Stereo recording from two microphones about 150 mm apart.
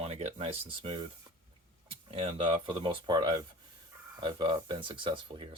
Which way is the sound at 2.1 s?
40° right (ahead or behind).